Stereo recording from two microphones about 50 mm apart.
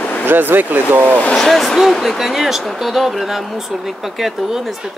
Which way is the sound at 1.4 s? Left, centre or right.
Centre.